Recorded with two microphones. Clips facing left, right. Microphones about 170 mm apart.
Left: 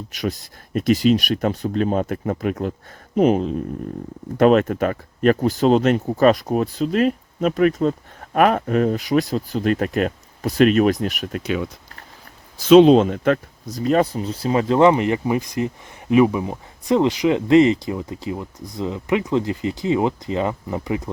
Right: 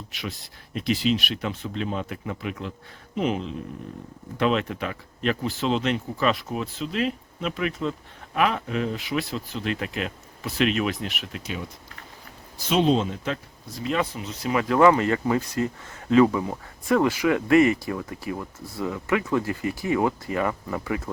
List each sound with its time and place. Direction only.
0.1 s speech: 40° left (ahead or behind)
12.6 s speech: 85° left; by 13.4 s 60° left (ahead or behind)
13.7 s speech: 40° left (ahead or behind); by 21.1 s 20° left (ahead or behind)